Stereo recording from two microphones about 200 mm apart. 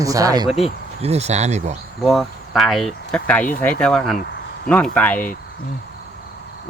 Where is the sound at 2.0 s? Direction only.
Centre (ahead or behind).